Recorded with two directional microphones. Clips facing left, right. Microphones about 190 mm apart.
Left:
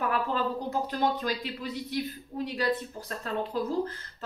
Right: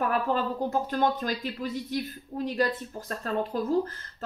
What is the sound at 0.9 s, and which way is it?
Speech, 45° right (ahead or behind).